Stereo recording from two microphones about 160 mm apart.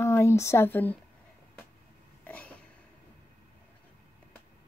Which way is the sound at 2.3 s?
5° left (ahead or behind).